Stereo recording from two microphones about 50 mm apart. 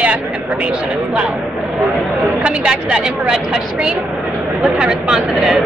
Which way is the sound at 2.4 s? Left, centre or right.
Centre.